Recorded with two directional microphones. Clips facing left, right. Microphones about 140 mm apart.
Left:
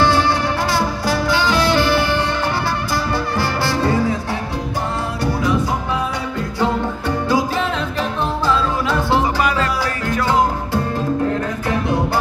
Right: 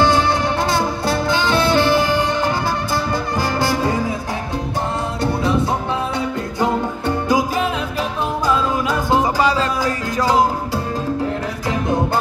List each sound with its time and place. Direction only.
0.0 s music: 20° right (ahead or behind)
6.6 s music: 15° right (ahead or behind)